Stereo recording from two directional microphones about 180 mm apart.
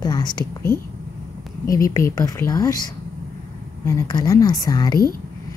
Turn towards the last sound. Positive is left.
turn(degrees=20)  # may be behind; listen again after turning